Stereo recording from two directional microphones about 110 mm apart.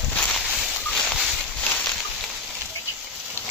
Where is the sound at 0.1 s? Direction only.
10° left (ahead or behind).